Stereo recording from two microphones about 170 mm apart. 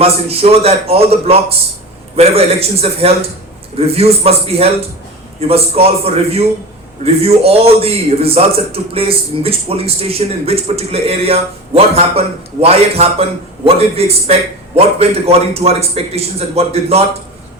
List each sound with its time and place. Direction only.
0.0 s a man's voice: 35° right (ahead or behind)